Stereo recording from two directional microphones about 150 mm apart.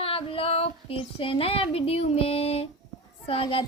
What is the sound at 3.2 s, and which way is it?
Speech, 40° left (ahead or behind).